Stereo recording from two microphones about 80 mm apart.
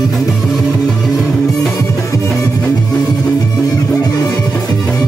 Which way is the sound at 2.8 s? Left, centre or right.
Left.